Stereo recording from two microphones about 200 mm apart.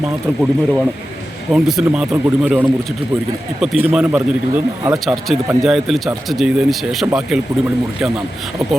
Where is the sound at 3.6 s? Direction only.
5° right (ahead or behind).